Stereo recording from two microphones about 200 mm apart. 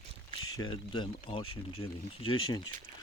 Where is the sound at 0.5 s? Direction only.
25° left (ahead or behind).